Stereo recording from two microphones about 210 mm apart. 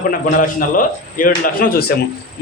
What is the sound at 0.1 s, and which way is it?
A man's voice, 40° left (ahead or behind).